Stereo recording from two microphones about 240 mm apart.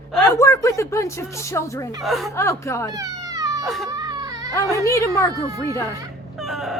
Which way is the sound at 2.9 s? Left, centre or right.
Centre.